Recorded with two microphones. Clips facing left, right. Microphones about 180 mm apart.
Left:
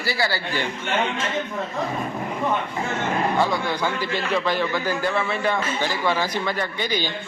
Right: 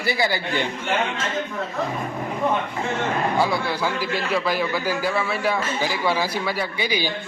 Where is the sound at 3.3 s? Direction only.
10° right (ahead or behind).